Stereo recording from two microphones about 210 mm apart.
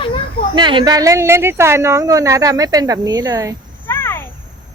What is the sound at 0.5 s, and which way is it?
A woman's voice, 20° right (ahead or behind).